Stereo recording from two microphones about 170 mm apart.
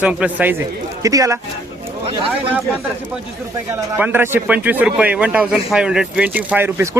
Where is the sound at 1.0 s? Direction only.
20° right (ahead or behind).